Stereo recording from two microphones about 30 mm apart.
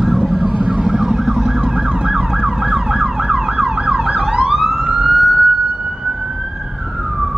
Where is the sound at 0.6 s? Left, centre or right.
Right.